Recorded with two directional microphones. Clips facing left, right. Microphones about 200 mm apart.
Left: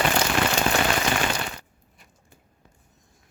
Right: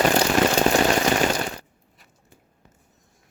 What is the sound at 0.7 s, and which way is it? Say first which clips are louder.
Rain on surface: right 5 dB; 40° right (ahead or behind).